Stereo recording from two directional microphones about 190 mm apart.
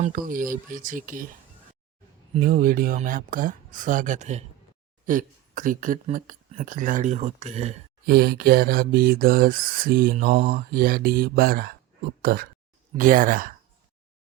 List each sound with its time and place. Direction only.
0.0 s mantra: 45° right (ahead or behind)
2.4 s mantra: 50° right (ahead or behind)
8.0 s mantra: 55° right (ahead or behind)
12.2 s speech: 50° right (ahead or behind)
13.0 s mantra: 45° right (ahead or behind)